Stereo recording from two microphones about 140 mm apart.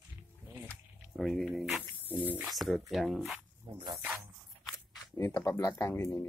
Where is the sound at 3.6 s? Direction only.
30° right (ahead or behind).